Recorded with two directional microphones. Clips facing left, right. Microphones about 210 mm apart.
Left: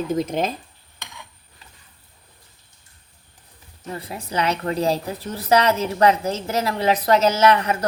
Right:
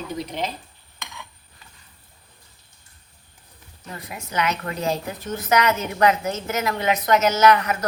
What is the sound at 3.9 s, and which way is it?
A woman's voice, 30° left (ahead or behind).